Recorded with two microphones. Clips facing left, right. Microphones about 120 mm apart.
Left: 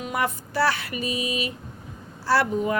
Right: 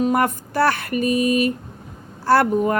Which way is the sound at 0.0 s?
50° right (ahead or behind).